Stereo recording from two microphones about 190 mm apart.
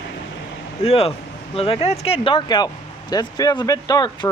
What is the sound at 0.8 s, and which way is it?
Speech, 30° left (ahead or behind).